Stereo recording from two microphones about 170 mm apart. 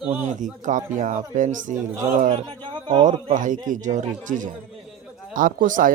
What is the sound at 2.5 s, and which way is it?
Speech, 30° right (ahead or behind).